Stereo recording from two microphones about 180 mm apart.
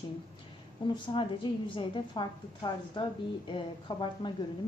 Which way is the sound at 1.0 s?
30° left (ahead or behind).